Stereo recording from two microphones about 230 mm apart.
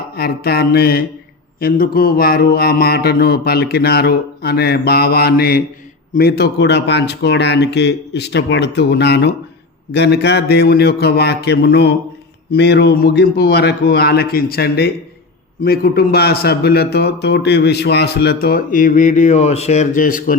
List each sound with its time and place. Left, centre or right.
0.2 s mantra: left
15.6 s a man's voice: left